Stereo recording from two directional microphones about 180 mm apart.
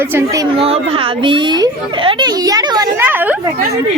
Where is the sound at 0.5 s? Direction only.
30° right (ahead or behind).